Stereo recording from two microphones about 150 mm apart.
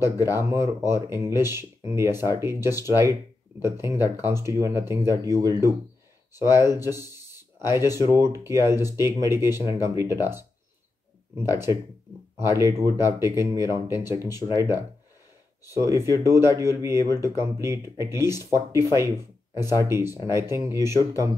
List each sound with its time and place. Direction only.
0.0 s speech: 15° right (ahead or behind)